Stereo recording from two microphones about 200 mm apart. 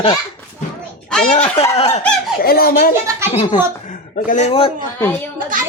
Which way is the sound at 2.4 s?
50° left (ahead or behind).